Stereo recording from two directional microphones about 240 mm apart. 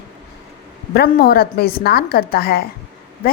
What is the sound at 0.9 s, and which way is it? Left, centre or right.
Speech, left.